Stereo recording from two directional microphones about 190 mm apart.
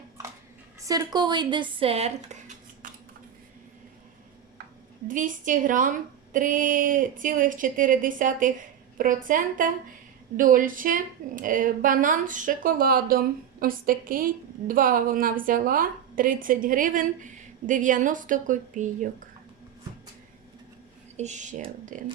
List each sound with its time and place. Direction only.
0.8 s speech: 20° right (ahead or behind); by 2.6 s 35° right (ahead or behind)
2.8 s a sound: 45° right (ahead or behind)
5.0 s a woman's voice: 45° right (ahead or behind)
21.2 s speech: 40° right (ahead or behind)